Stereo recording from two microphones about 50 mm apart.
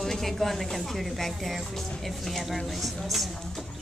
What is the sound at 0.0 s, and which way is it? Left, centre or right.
Speech, centre.